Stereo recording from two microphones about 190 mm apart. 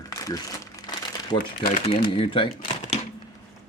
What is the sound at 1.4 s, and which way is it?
Speech, 45° left (ahead or behind).